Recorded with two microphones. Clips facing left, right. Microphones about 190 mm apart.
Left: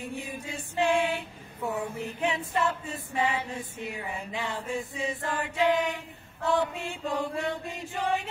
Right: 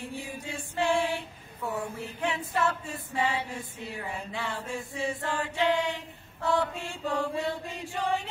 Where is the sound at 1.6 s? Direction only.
15° left (ahead or behind).